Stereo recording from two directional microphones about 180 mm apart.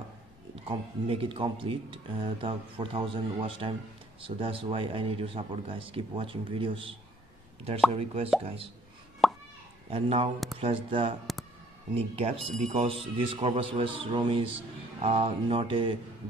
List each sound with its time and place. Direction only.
0.7 s a man's voice: 30° right (ahead or behind)
7.9 s a man's voice: 35° right (ahead or behind)
9.2 s plop: centre (ahead or behind)
9.8 s a man's voice: 35° right (ahead or behind)